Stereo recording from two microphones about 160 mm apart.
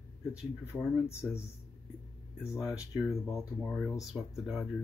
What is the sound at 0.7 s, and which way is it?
Speech, 15° left (ahead or behind).